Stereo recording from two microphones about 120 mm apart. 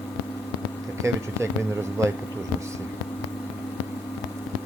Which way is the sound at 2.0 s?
25° right (ahead or behind).